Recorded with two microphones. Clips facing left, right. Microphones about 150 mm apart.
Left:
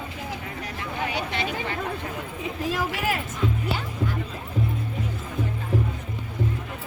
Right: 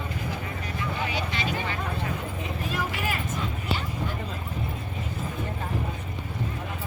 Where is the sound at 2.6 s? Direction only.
90° left.